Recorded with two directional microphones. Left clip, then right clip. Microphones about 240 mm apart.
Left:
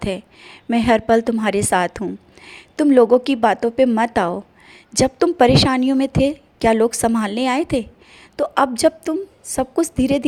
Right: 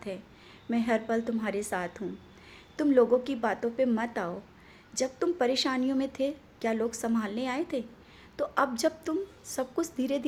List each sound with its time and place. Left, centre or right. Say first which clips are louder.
0.0 s a woman's voice: left 14 dB; left